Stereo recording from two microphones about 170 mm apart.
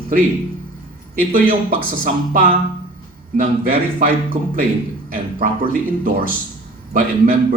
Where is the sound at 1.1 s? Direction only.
55° right (ahead or behind).